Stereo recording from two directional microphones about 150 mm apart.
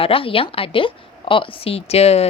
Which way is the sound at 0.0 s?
35° left (ahead or behind).